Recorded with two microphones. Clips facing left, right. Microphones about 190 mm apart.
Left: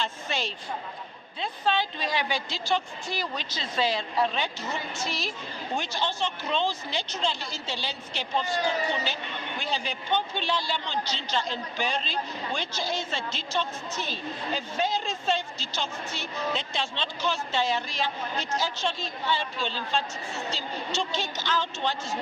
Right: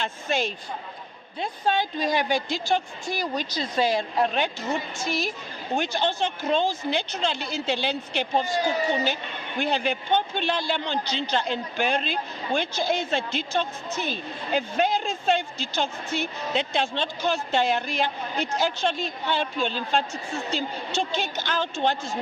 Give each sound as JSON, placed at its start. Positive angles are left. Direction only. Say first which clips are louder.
{"t": 0.0, "sound": "a woman's voice", "louder": "right 5 dB", "side_deg": -50}
{"t": 9.6, "sound": "a woman's voice", "louder": "right 9 dB", "side_deg": -60}